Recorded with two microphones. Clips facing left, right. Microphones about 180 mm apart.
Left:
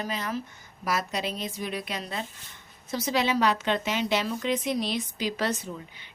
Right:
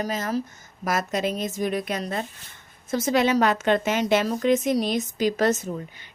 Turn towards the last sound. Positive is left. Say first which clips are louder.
# right 6 dB
turn(degrees=-45)  # may be behind; listen again after turning